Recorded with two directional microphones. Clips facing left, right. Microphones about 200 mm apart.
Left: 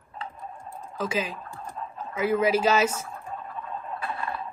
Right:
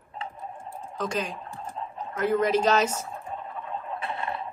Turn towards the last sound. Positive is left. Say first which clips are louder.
# even
turn(degrees=-25)  # may be behind; listen again after turning